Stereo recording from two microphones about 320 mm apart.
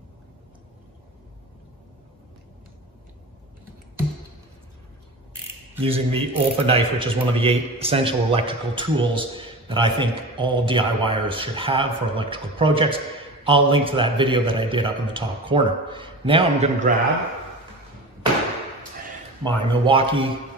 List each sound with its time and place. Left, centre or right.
5.8 s a man's voice: centre
19.4 s a man's voice: centre